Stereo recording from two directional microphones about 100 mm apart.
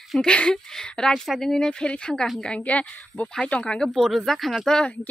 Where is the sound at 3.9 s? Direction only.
Centre (ahead or behind).